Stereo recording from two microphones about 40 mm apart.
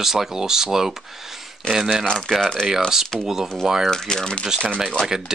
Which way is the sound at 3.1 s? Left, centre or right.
Centre.